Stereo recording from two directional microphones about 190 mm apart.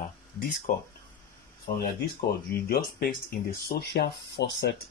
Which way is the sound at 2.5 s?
50° left (ahead or behind).